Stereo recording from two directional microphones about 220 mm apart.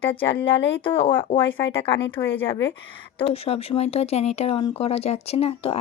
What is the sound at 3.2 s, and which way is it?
Speech, 25° left (ahead or behind).